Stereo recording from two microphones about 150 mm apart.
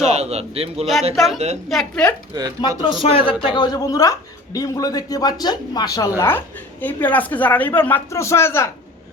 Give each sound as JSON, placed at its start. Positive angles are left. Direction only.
{"t": 0.0, "sound": "a man's voice", "side_deg": -45}
{"t": 1.1, "sound": "speech", "side_deg": 0}
{"t": 2.6, "sound": "speech", "side_deg": 30}